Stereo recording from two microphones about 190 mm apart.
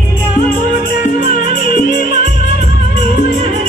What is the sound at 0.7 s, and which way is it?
Music, 50° left (ahead or behind).